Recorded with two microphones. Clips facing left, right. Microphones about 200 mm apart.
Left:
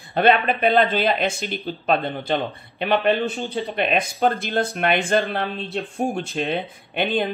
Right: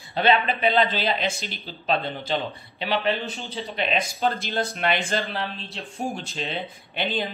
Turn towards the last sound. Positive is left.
turn(degrees=55)  # may be behind; listen again after turning